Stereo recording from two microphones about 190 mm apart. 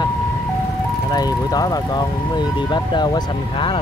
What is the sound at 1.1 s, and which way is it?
Speech, 20° left (ahead or behind).